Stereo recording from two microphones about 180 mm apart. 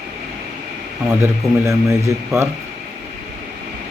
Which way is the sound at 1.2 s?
15° right (ahead or behind).